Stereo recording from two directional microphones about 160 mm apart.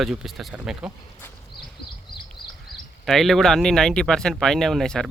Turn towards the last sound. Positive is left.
turn(degrees=5)  # may be behind; listen again after turning